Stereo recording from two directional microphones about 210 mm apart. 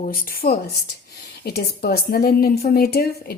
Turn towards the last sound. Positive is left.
turn(degrees=45)  # may be behind; listen again after turning